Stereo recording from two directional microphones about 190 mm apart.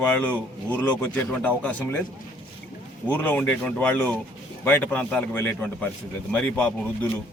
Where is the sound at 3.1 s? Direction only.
10° left (ahead or behind).